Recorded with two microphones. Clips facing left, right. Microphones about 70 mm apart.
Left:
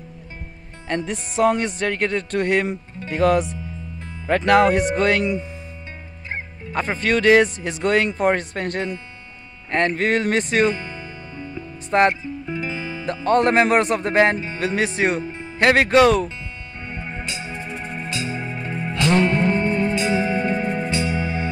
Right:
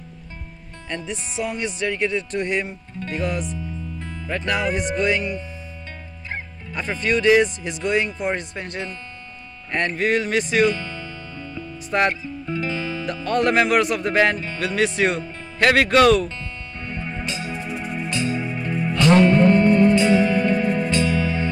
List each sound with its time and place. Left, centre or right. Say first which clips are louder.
0.8 s speech: left 5 dB; left
4.3 s speech: left 8 dB; left
4.9 s speech: left 2 dB; left
6.7 s speech: left 2 dB; left
9.9 s speech: left 1 dB; left
10.7 s music: even; centre
13.0 s speech: left 4 dB; left
16.8 s music: right 2 dB; centre
17.6 s music: right 2 dB; centre